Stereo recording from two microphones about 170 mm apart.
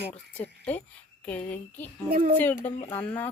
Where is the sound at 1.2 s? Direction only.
10° left (ahead or behind).